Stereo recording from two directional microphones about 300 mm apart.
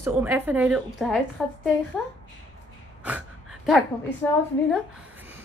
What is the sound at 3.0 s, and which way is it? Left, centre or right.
Gasp, centre.